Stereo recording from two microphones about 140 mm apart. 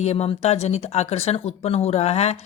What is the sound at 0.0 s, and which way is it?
Speech, 50° left (ahead or behind).